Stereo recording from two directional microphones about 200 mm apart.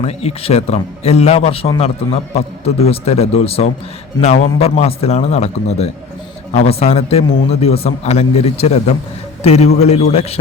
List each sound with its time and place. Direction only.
0.0 s a man's voice: 30° left (ahead or behind)